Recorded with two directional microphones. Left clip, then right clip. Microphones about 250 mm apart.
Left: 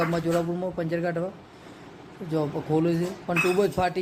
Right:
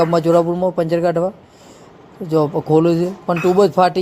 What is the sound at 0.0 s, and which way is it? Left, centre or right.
Speech, right.